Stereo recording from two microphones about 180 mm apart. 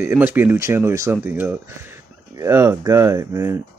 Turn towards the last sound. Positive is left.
turn(degrees=-15)  # may be behind; listen again after turning